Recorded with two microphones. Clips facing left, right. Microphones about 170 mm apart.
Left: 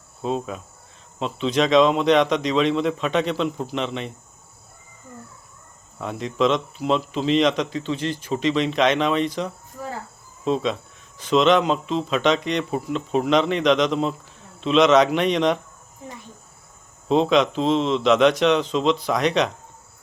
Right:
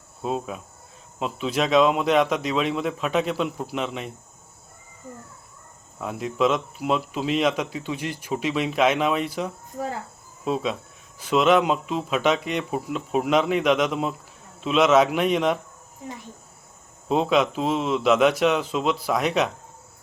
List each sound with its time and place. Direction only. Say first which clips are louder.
0.2 s speech: left 2 dB; 5° right (ahead or behind)
6.0 s speech: left 1 dB; 5° right (ahead or behind)
17.1 s speech: left 3 dB; 5° right (ahead or behind)